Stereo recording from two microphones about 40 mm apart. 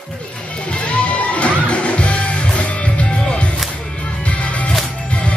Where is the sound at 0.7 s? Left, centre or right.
Left.